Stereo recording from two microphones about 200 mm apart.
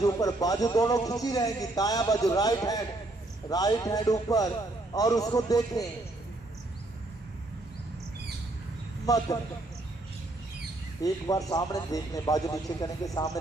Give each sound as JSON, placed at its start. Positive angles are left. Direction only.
{"t": 0.0, "sound": "a man's voice", "side_deg": 15}
{"t": 9.0, "sound": "a man's voice", "side_deg": 20}
{"t": 11.0, "sound": "a man's voice", "side_deg": 15}